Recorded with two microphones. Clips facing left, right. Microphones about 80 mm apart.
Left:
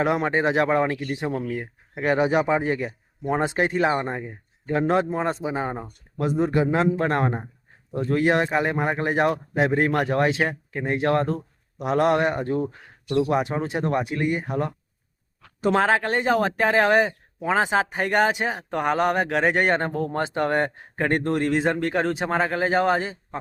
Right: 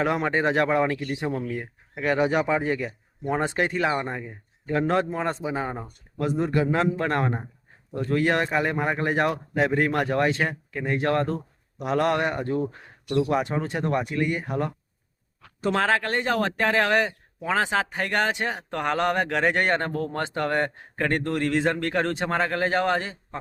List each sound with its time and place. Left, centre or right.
0.0 s speech: centre
1.2 s speech: centre
9.9 s speech: centre